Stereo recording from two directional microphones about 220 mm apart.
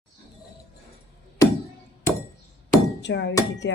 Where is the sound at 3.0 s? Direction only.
55° left (ahead or behind).